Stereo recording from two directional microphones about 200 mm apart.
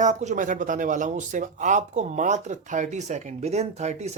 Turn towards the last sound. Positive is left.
turn(degrees=-35)  # may be behind; listen again after turning